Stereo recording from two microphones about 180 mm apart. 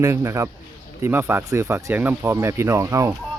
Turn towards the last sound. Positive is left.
turn(degrees=-15)  # may be behind; listen again after turning